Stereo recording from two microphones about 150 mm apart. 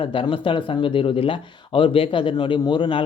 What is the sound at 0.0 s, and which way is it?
Speech, 35° left (ahead or behind).